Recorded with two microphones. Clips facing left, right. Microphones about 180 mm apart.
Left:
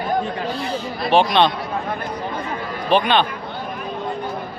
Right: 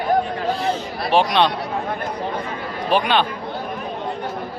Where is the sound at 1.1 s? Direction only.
5° right (ahead or behind).